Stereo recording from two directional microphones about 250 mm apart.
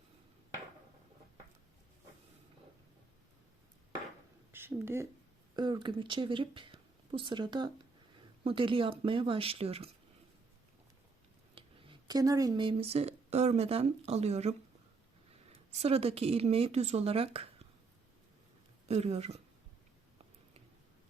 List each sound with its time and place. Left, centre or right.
4.5 s speech: centre
11.5 s speech: centre
15.8 s speech: right
18.9 s speech: right